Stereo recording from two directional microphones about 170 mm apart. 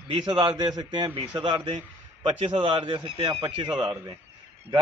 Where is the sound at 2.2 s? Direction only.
30° right (ahead or behind).